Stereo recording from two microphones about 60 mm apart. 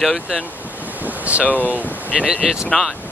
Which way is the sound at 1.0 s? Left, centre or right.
Right.